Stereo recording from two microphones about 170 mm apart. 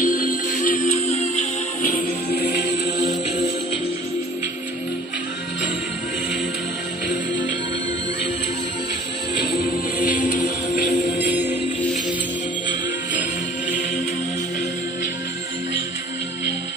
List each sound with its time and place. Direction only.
0.0 s music: 55° left (ahead or behind)
1.1 s music: 40° left (ahead or behind)
2.0 s music: 70° left (ahead or behind)
2.6 s music: 45° left (ahead or behind)
10.1 s music: 45° left (ahead or behind)